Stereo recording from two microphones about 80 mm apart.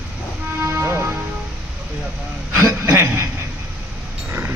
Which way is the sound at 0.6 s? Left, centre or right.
Right.